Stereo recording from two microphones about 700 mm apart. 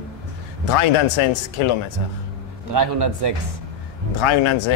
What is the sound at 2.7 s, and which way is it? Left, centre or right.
Speech, right.